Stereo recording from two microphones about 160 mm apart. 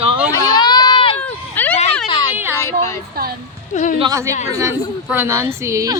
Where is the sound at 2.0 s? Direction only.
30° left (ahead or behind).